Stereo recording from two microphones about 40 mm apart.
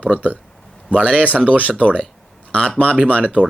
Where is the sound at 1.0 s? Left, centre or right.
Left.